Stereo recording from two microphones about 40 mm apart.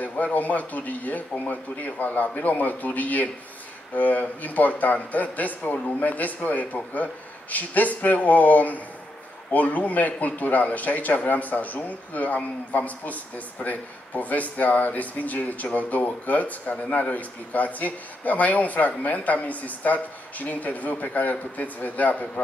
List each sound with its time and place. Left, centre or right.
0.0 s a man's voice: left